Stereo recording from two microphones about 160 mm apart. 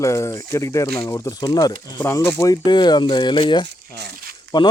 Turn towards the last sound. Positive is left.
turn(degrees=25)  # may be behind; listen again after turning